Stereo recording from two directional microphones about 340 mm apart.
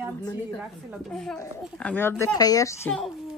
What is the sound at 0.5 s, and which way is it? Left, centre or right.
Speech, centre.